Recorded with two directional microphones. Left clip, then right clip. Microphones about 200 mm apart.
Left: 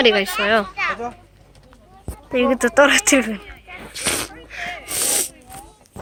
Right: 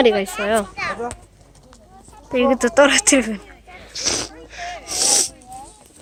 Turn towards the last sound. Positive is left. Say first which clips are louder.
# right 5 dB
turn(degrees=0)  # may be behind; listen again after turning